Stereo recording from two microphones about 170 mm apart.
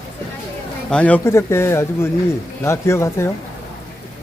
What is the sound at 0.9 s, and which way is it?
Speech, 10° left (ahead or behind).